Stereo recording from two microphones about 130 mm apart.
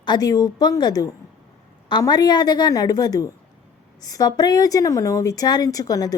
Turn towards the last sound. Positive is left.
turn(degrees=30)  # may be behind; listen again after turning